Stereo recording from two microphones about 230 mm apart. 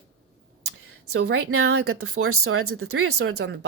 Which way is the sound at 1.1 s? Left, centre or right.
Right.